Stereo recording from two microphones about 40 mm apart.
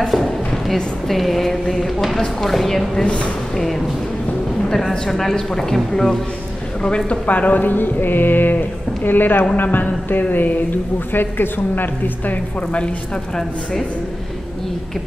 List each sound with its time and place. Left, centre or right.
0.1 s a sound: centre
1.0 s speech: centre
4.6 s speech: centre
7.2 s a woman's voice: left